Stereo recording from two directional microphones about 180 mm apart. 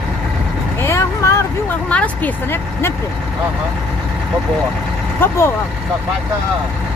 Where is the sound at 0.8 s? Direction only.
15° left (ahead or behind).